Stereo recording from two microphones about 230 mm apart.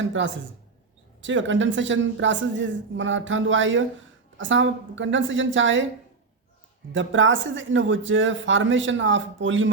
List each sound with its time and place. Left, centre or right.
0.0 s a man's voice: right
6.9 s a man's voice: right